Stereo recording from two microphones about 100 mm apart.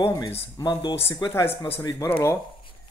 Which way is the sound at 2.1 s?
20° left (ahead or behind).